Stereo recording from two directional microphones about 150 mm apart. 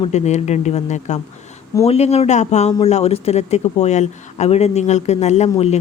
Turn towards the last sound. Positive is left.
turn(degrees=45)  # may be behind; listen again after turning